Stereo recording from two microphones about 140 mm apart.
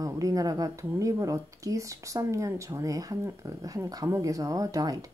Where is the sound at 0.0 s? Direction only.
25° right (ahead or behind).